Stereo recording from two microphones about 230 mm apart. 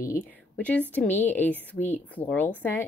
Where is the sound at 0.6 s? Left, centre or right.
Centre.